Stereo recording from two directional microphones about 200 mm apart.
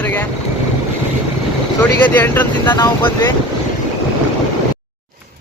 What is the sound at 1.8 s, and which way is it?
Speech, 10° left (ahead or behind).